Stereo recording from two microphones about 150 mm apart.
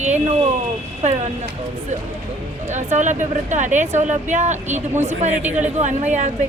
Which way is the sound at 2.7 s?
50° right (ahead or behind).